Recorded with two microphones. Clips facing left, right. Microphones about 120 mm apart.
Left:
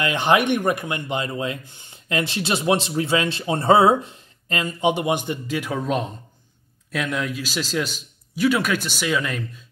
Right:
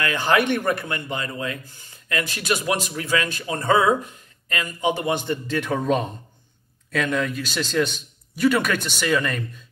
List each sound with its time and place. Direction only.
0.0 s speech: 20° left (ahead or behind); by 9.4 s centre (ahead or behind)